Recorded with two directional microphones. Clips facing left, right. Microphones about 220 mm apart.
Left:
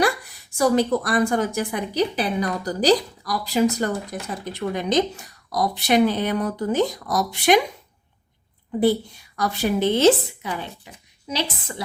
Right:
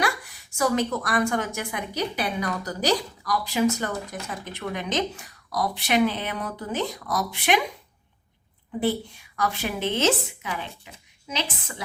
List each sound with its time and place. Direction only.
0.5 s a woman's voice: 35° left (ahead or behind)
8.8 s a woman's voice: 40° left (ahead or behind)